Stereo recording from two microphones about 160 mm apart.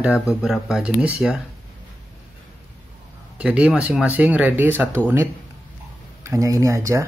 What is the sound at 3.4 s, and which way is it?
Speech, 10° right (ahead or behind).